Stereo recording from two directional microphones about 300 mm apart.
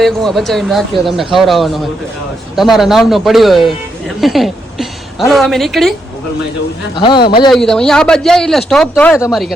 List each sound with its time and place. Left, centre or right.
0.0 s a woman's voice: centre
6.9 s a man's voice: centre
7.5 s speech: centre